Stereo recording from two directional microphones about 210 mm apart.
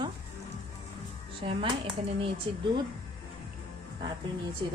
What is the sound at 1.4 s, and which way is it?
Speech, 25° right (ahead or behind).